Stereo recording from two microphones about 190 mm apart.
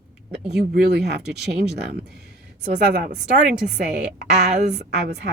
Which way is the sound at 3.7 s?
55° right (ahead or behind).